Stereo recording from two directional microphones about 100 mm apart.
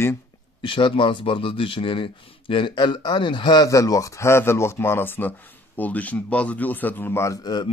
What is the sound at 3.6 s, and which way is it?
A man's voice, 35° left (ahead or behind).